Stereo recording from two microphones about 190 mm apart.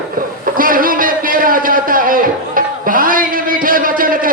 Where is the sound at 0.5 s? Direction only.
50° right (ahead or behind).